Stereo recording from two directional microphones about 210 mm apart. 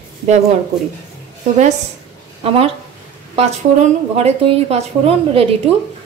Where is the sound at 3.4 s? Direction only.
30° right (ahead or behind).